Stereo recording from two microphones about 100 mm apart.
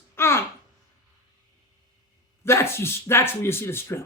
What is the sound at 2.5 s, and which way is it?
Speech, 25° left (ahead or behind).